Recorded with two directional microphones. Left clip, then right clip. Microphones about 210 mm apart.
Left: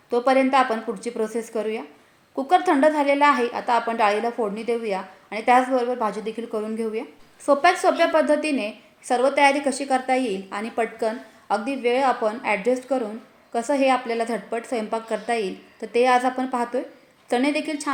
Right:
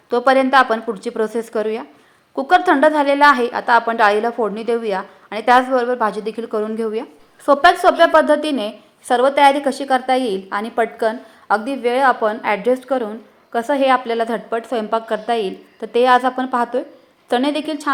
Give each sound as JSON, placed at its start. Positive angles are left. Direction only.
{"t": 0.1, "sound": "a woman's voice", "side_deg": -20}